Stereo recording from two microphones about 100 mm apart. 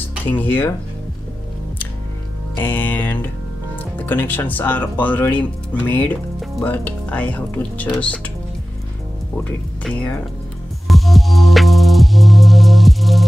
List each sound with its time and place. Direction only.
0.3 s music: 20° left (ahead or behind)
2.6 s music: 20° left (ahead or behind)
4.0 s speech: 20° left (ahead or behind)
9.8 s speech: 15° left (ahead or behind)
10.9 s music: centre (ahead or behind)